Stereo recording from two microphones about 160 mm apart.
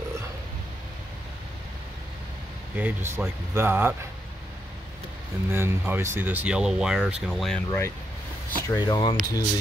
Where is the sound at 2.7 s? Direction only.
10° right (ahead or behind).